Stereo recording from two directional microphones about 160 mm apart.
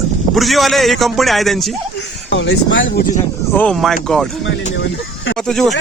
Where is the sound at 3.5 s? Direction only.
5° left (ahead or behind).